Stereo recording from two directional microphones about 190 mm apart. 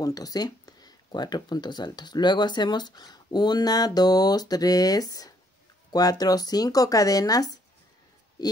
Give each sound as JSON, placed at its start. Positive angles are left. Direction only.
{"t": 0.0, "sound": "speech", "side_deg": 20}